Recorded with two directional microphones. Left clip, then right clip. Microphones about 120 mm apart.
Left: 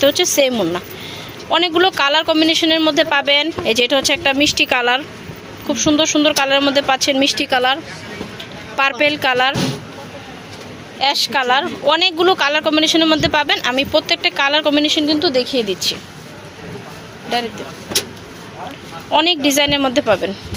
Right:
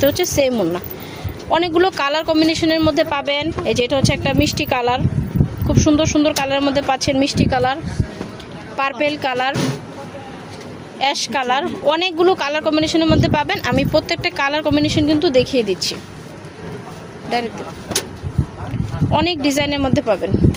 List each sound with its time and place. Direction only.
0.0 s speech: 10° right (ahead or behind)
5.6 s speech: 15° right (ahead or behind)
6.3 s speech: 5° right (ahead or behind)
11.0 s speech: 20° right (ahead or behind)
13.6 s a woman's voice: 20° right (ahead or behind)
14.3 s a woman's voice: 10° right (ahead or behind)
17.2 s speech: 15° right (ahead or behind)
19.1 s speech: 5° right (ahead or behind)